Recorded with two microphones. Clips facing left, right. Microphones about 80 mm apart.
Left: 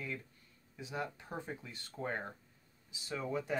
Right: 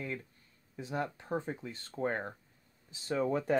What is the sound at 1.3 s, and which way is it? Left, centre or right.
Speech, right.